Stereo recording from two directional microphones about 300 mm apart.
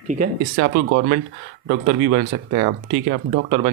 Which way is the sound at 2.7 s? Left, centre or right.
Right.